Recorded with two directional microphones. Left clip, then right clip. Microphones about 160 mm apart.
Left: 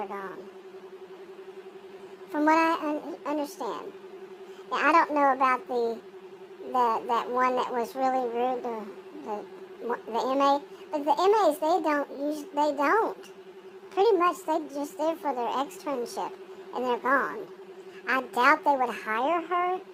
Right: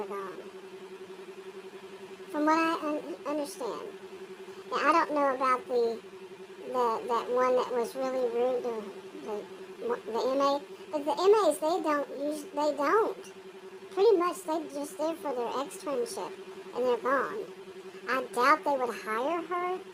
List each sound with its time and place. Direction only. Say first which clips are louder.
2.3 s a woman's voice: left 4 dB; 25° left (ahead or behind)
9.9 s a child's voice: left 2 dB; 25° left (ahead or behind)